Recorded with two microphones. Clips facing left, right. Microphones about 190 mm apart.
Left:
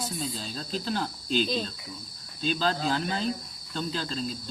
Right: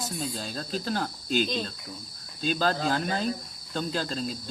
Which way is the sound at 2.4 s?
45° right (ahead or behind).